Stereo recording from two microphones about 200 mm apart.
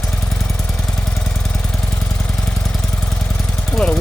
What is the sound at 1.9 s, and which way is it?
Engine, 5° left (ahead or behind).